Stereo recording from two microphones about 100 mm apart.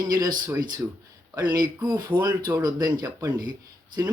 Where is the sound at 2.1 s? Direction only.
15° right (ahead or behind).